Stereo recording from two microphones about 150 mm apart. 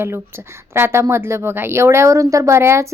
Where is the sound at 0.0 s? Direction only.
15° right (ahead or behind).